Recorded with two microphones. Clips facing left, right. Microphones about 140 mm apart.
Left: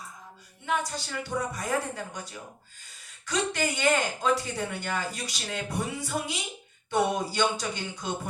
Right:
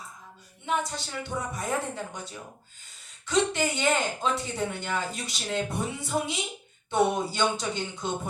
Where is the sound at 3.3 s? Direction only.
20° right (ahead or behind).